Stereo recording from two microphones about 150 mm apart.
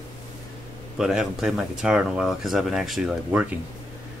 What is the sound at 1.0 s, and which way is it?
Speech, 5° right (ahead or behind).